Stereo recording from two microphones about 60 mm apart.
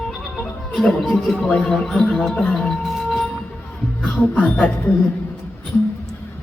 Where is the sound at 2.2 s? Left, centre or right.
Centre.